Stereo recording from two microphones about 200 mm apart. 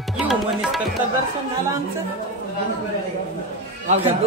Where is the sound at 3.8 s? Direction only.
30° right (ahead or behind).